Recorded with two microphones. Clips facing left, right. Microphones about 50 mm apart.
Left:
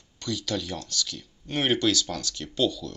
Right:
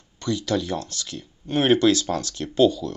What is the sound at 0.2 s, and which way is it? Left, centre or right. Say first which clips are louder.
Speech: right 6 dB; right.